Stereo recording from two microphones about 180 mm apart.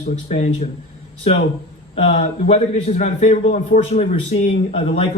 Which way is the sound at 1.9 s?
35° left (ahead or behind).